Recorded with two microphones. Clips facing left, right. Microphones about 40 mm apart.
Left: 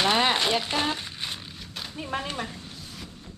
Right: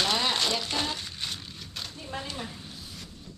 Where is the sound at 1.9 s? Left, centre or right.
Left.